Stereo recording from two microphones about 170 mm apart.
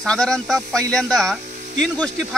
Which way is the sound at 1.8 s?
5° left (ahead or behind).